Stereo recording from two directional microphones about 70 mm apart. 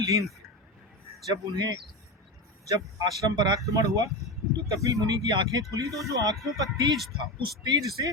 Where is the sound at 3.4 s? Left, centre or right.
Right.